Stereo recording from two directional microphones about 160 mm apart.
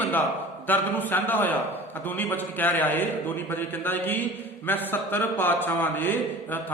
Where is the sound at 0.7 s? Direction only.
10° left (ahead or behind).